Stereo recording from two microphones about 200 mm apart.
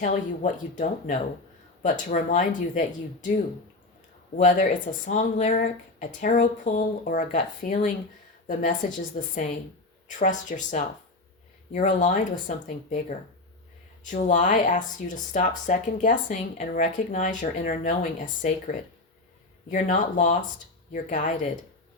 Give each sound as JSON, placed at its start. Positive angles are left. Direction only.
{"t": 0.0, "sound": "speech", "side_deg": 40}
{"t": 4.4, "sound": "speech", "side_deg": 40}
{"t": 9.1, "sound": "speech", "side_deg": 40}